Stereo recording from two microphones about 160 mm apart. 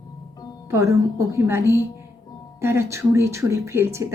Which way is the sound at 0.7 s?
20° right (ahead or behind).